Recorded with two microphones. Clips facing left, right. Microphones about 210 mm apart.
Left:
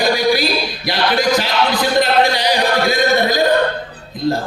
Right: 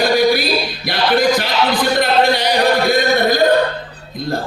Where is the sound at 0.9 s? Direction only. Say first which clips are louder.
Right 2 dB; 55° right (ahead or behind).